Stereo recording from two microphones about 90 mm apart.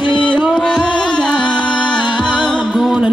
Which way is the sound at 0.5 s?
10° left (ahead or behind).